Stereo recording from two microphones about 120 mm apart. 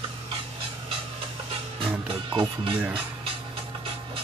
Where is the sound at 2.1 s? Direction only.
45° right (ahead or behind).